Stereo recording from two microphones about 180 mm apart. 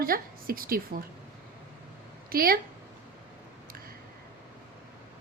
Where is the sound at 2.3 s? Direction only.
55° right (ahead or behind).